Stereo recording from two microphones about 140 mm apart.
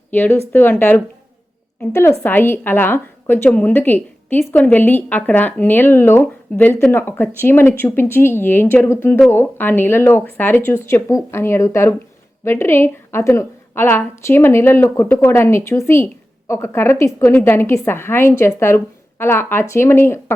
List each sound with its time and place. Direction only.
0.1 s a woman's voice: 15° left (ahead or behind)